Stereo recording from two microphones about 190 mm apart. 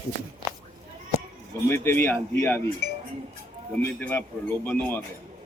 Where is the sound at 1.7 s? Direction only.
10° left (ahead or behind).